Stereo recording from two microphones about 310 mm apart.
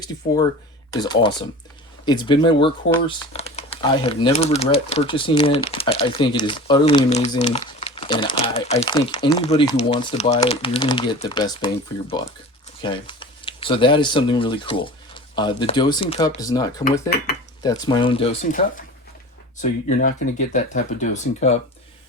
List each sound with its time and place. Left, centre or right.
0.9 s speech: centre
19.6 s speech: left